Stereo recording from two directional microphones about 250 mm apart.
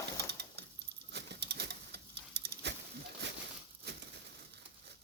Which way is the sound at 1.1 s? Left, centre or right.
Right.